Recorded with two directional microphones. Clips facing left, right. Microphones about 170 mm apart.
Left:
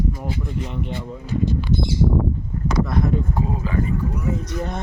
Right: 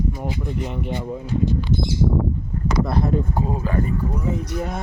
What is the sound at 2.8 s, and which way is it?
Speech, 35° right (ahead or behind).